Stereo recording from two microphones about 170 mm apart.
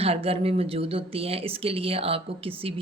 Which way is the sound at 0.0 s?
35° right (ahead or behind).